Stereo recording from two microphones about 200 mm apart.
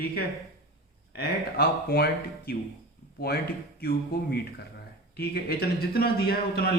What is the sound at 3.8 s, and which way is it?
Speech, 50° left (ahead or behind).